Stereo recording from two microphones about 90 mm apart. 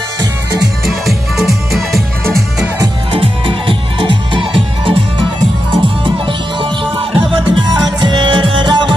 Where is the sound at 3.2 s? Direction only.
70° right (ahead or behind).